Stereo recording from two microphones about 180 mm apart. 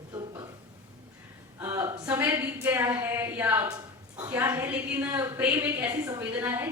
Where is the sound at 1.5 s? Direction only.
15° right (ahead or behind).